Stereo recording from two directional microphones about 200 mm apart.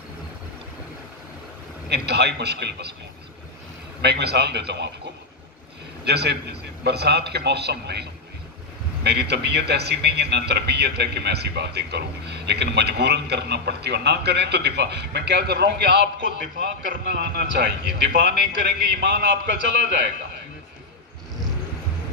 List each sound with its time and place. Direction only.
1.9 s speech: 55° right (ahead or behind)
4.0 s speech: 55° right (ahead or behind)
6.0 s speech: 55° right (ahead or behind)